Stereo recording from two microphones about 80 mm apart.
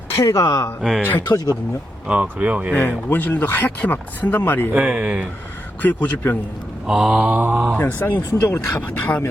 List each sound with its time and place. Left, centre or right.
0.2 s speech: left
0.8 s speech: centre
2.0 s speech: centre
3.1 s speech: left
4.7 s speech: centre
5.8 s speech: centre
6.8 s mantra: centre
7.8 s speech: left